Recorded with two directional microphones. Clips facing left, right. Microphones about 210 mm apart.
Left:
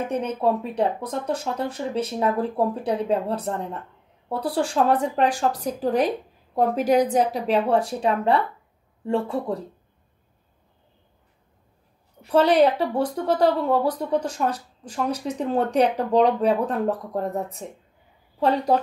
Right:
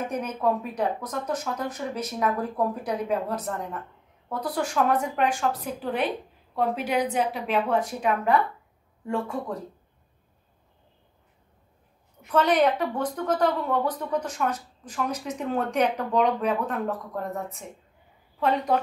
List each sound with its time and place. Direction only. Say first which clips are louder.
0.4 s a woman's voice: left 2 dB; 30° left (ahead or behind)
12.2 s a woman's voice: left 4 dB; 30° left (ahead or behind)